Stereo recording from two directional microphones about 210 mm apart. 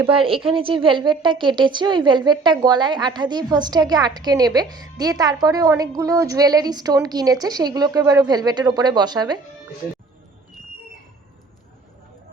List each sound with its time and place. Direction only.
0.1 s a woman's voice: 25° right (ahead or behind)